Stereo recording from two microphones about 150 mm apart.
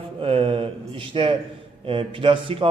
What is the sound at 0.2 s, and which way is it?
Mantra, 35° right (ahead or behind).